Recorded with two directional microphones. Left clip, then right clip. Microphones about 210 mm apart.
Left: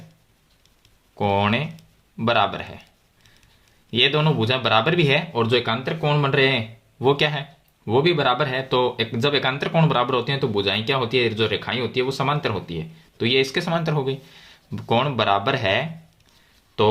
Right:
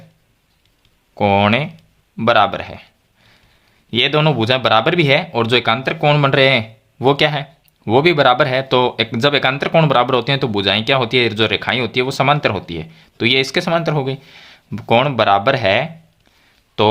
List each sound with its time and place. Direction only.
1.1 s speech: 35° right (ahead or behind)
3.9 s speech: 35° right (ahead or behind)